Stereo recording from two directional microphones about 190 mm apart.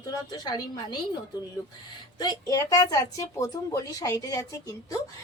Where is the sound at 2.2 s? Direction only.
20° left (ahead or behind).